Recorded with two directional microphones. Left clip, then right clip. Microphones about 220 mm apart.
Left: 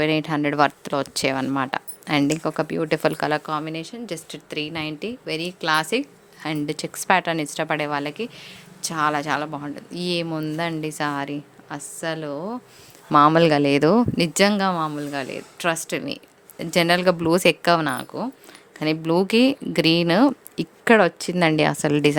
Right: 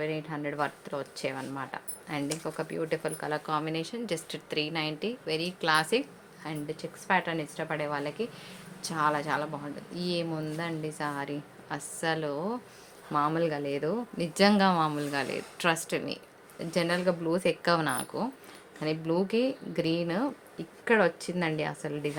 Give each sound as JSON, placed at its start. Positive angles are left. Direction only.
{"t": 0.0, "sound": "speech", "side_deg": 55}
{"t": 3.4, "sound": "a woman's voice", "side_deg": 25}
{"t": 13.1, "sound": "speech", "side_deg": 50}
{"t": 14.3, "sound": "a woman's voice", "side_deg": 30}